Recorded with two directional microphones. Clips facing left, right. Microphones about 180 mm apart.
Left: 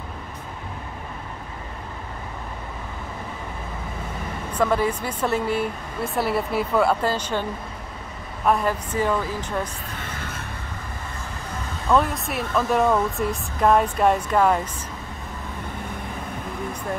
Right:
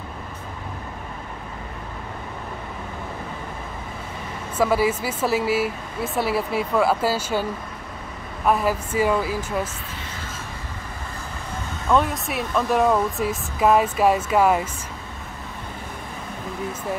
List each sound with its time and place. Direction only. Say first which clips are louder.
4.6 s speech: right 2 dB; 5° right (ahead or behind)
8.5 s speech: right 1 dB; 5° right (ahead or behind)
9.9 s music: left 2 dB; 60° left (ahead or behind)
11.9 s speech: even; centre (ahead or behind)